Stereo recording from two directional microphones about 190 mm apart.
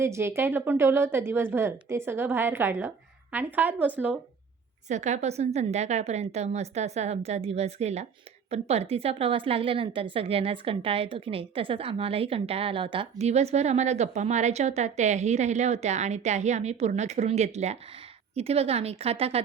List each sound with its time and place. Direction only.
0.0 s a woman's voice: 15° right (ahead or behind)
4.9 s a woman's voice: 40° right (ahead or behind)